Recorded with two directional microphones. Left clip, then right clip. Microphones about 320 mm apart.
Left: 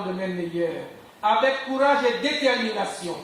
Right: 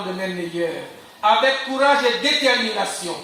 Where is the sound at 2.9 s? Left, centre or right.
Left.